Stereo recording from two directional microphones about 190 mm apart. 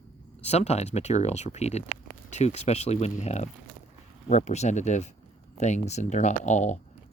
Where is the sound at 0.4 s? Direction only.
35° left (ahead or behind).